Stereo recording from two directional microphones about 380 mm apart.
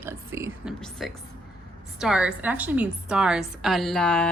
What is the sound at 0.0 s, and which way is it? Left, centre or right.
A woman's voice, centre.